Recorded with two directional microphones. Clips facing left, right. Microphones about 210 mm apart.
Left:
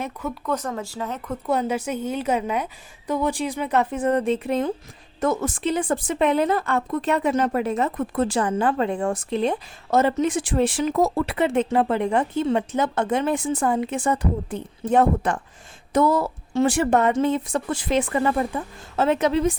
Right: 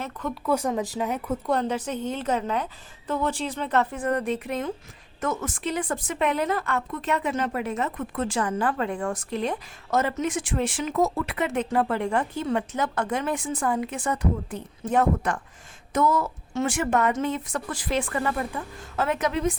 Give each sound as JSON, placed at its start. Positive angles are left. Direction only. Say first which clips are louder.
{"t": 0.0, "sound": "speech", "louder": "left 2 dB", "side_deg": 10}
{"t": 0.4, "sound": "speech", "louder": "right 4 dB", "side_deg": -10}
{"t": 1.5, "sound": "a woman's voice", "louder": "left 4 dB", "side_deg": 5}